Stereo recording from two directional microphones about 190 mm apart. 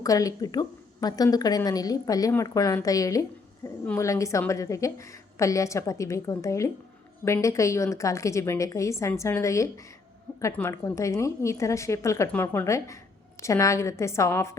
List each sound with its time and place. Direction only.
0.0 s a woman's voice: 20° left (ahead or behind)